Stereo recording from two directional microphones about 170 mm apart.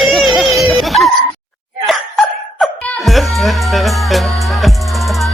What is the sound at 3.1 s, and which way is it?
Music, centre (ahead or behind).